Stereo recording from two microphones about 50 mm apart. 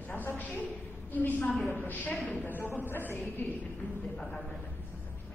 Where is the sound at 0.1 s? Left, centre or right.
Left.